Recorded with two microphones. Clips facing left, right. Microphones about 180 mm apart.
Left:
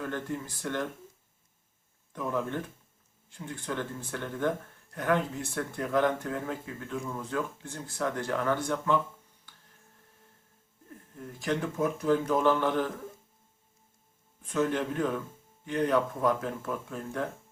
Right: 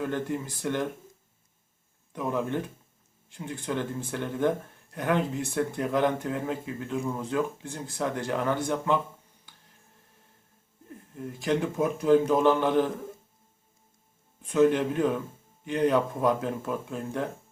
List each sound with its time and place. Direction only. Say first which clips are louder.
0.0 s speech: right 4 dB; 15° right (ahead or behind)
2.1 s speech: right 3 dB; 20° right (ahead or behind)
11.3 s speech: right 3 dB; 15° right (ahead or behind)
14.5 s speech: right 6 dB; 15° right (ahead or behind)